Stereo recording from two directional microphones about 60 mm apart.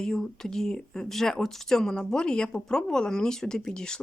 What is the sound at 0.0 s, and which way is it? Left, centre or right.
Speech, centre.